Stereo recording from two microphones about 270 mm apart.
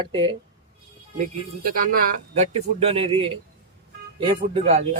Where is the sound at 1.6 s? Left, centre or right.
Right.